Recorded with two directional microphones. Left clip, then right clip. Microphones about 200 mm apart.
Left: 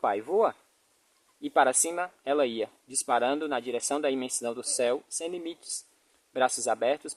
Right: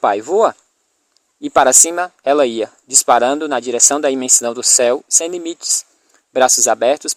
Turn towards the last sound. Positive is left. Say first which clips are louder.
# right 13 dB
turn(degrees=-45)  # may be behind; listen again after turning